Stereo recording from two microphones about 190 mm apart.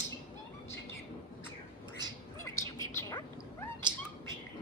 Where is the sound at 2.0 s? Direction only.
20° right (ahead or behind).